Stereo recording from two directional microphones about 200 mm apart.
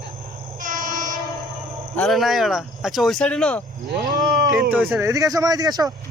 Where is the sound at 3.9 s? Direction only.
40° right (ahead or behind).